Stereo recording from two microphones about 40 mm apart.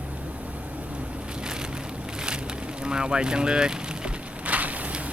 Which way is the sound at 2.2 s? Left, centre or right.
Right.